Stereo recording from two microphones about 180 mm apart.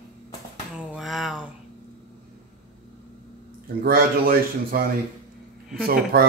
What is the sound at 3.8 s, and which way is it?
Speech, 55° right (ahead or behind).